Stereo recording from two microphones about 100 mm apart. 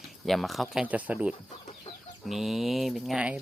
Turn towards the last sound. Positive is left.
turn(degrees=0)  # may be behind; listen again after turning